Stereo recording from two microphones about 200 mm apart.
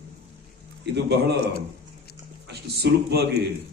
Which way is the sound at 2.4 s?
55° right (ahead or behind).